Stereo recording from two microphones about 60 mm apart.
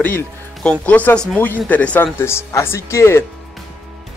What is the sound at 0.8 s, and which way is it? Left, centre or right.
Speech, left.